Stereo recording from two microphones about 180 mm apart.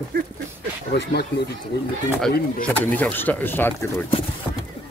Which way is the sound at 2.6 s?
5° left (ahead or behind).